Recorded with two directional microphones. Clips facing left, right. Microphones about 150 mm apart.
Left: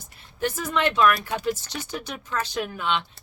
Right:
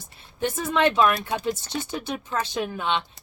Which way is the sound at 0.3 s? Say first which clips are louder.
Right 2 dB; 25° right (ahead or behind).